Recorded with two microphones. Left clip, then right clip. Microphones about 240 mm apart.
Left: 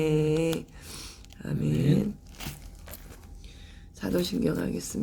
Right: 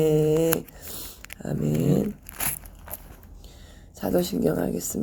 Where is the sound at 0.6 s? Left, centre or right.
Centre.